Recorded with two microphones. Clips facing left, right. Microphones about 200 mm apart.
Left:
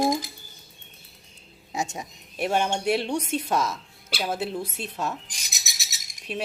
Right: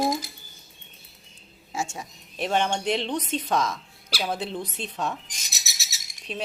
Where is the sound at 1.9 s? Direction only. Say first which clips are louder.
Left 2 dB; 20° left (ahead or behind).